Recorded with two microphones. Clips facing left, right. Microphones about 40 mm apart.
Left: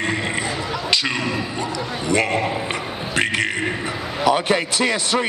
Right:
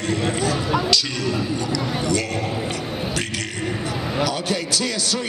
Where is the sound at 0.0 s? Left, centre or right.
Left.